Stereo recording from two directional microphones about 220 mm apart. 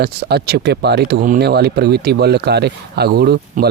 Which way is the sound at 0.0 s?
45° right (ahead or behind).